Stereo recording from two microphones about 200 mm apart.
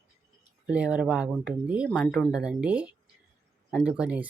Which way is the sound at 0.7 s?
5° right (ahead or behind).